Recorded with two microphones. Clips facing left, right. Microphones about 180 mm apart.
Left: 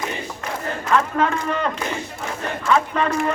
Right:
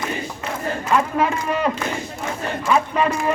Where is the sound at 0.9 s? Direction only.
10° right (ahead or behind).